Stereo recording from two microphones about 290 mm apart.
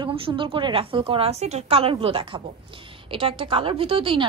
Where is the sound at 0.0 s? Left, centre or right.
Centre.